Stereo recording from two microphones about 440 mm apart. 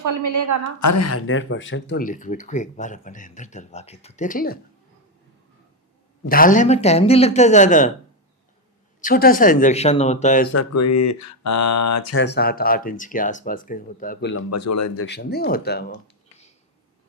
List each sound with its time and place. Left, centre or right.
0.0 s a woman's voice: right
0.8 s speech: left; by 4.5 s centre
6.2 s speech: centre
9.0 s speech: centre
10.5 s speech: left
12.2 s speech: left
14.5 s speech: left
15.0 s speech: left